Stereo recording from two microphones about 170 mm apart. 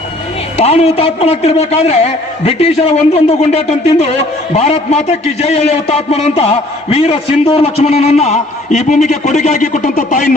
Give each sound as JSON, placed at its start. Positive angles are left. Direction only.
{"t": 0.5, "sound": "a man's voice", "side_deg": 40}